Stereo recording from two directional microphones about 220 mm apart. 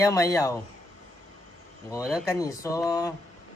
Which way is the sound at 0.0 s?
15° left (ahead or behind).